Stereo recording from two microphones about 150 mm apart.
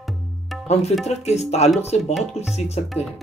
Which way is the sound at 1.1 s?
45° left (ahead or behind).